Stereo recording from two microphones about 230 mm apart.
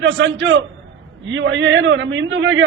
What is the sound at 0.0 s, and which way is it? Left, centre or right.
A man's voice, right.